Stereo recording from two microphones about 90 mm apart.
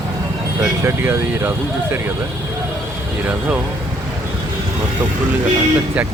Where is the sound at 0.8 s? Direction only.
25° right (ahead or behind).